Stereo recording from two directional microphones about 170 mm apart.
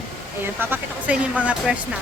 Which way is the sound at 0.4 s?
10° right (ahead or behind).